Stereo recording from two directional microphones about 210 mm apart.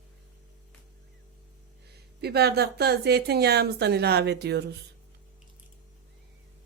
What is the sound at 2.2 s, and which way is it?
Speech, 50° right (ahead or behind).